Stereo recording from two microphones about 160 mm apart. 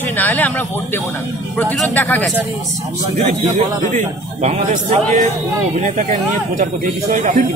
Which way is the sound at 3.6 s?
45° right (ahead or behind).